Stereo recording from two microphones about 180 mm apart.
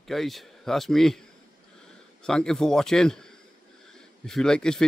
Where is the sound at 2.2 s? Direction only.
5° left (ahead or behind).